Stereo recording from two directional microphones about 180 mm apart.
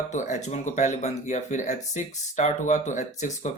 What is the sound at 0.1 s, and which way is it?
Speech, 40° left (ahead or behind).